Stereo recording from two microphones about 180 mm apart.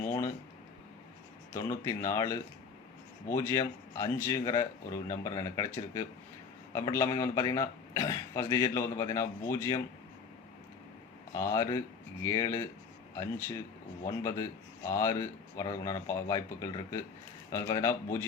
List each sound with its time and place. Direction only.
0.0 s a sound: 15° left (ahead or behind)
1.5 s a man's voice: 15° left (ahead or behind)
11.3 s a man's voice: 15° left (ahead or behind)
14.2 s a man's voice: 15° left (ahead or behind)